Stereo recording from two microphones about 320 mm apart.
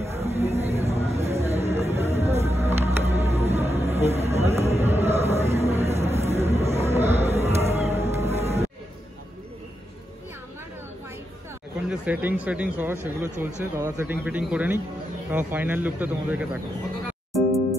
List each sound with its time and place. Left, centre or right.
0.0 s a sound: centre
1.2 s music: centre
11.9 s speech: centre
17.3 s music: centre